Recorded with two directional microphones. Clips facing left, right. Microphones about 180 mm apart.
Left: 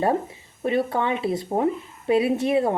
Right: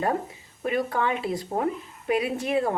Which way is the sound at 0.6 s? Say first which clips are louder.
Left 3 dB; 25° left (ahead or behind).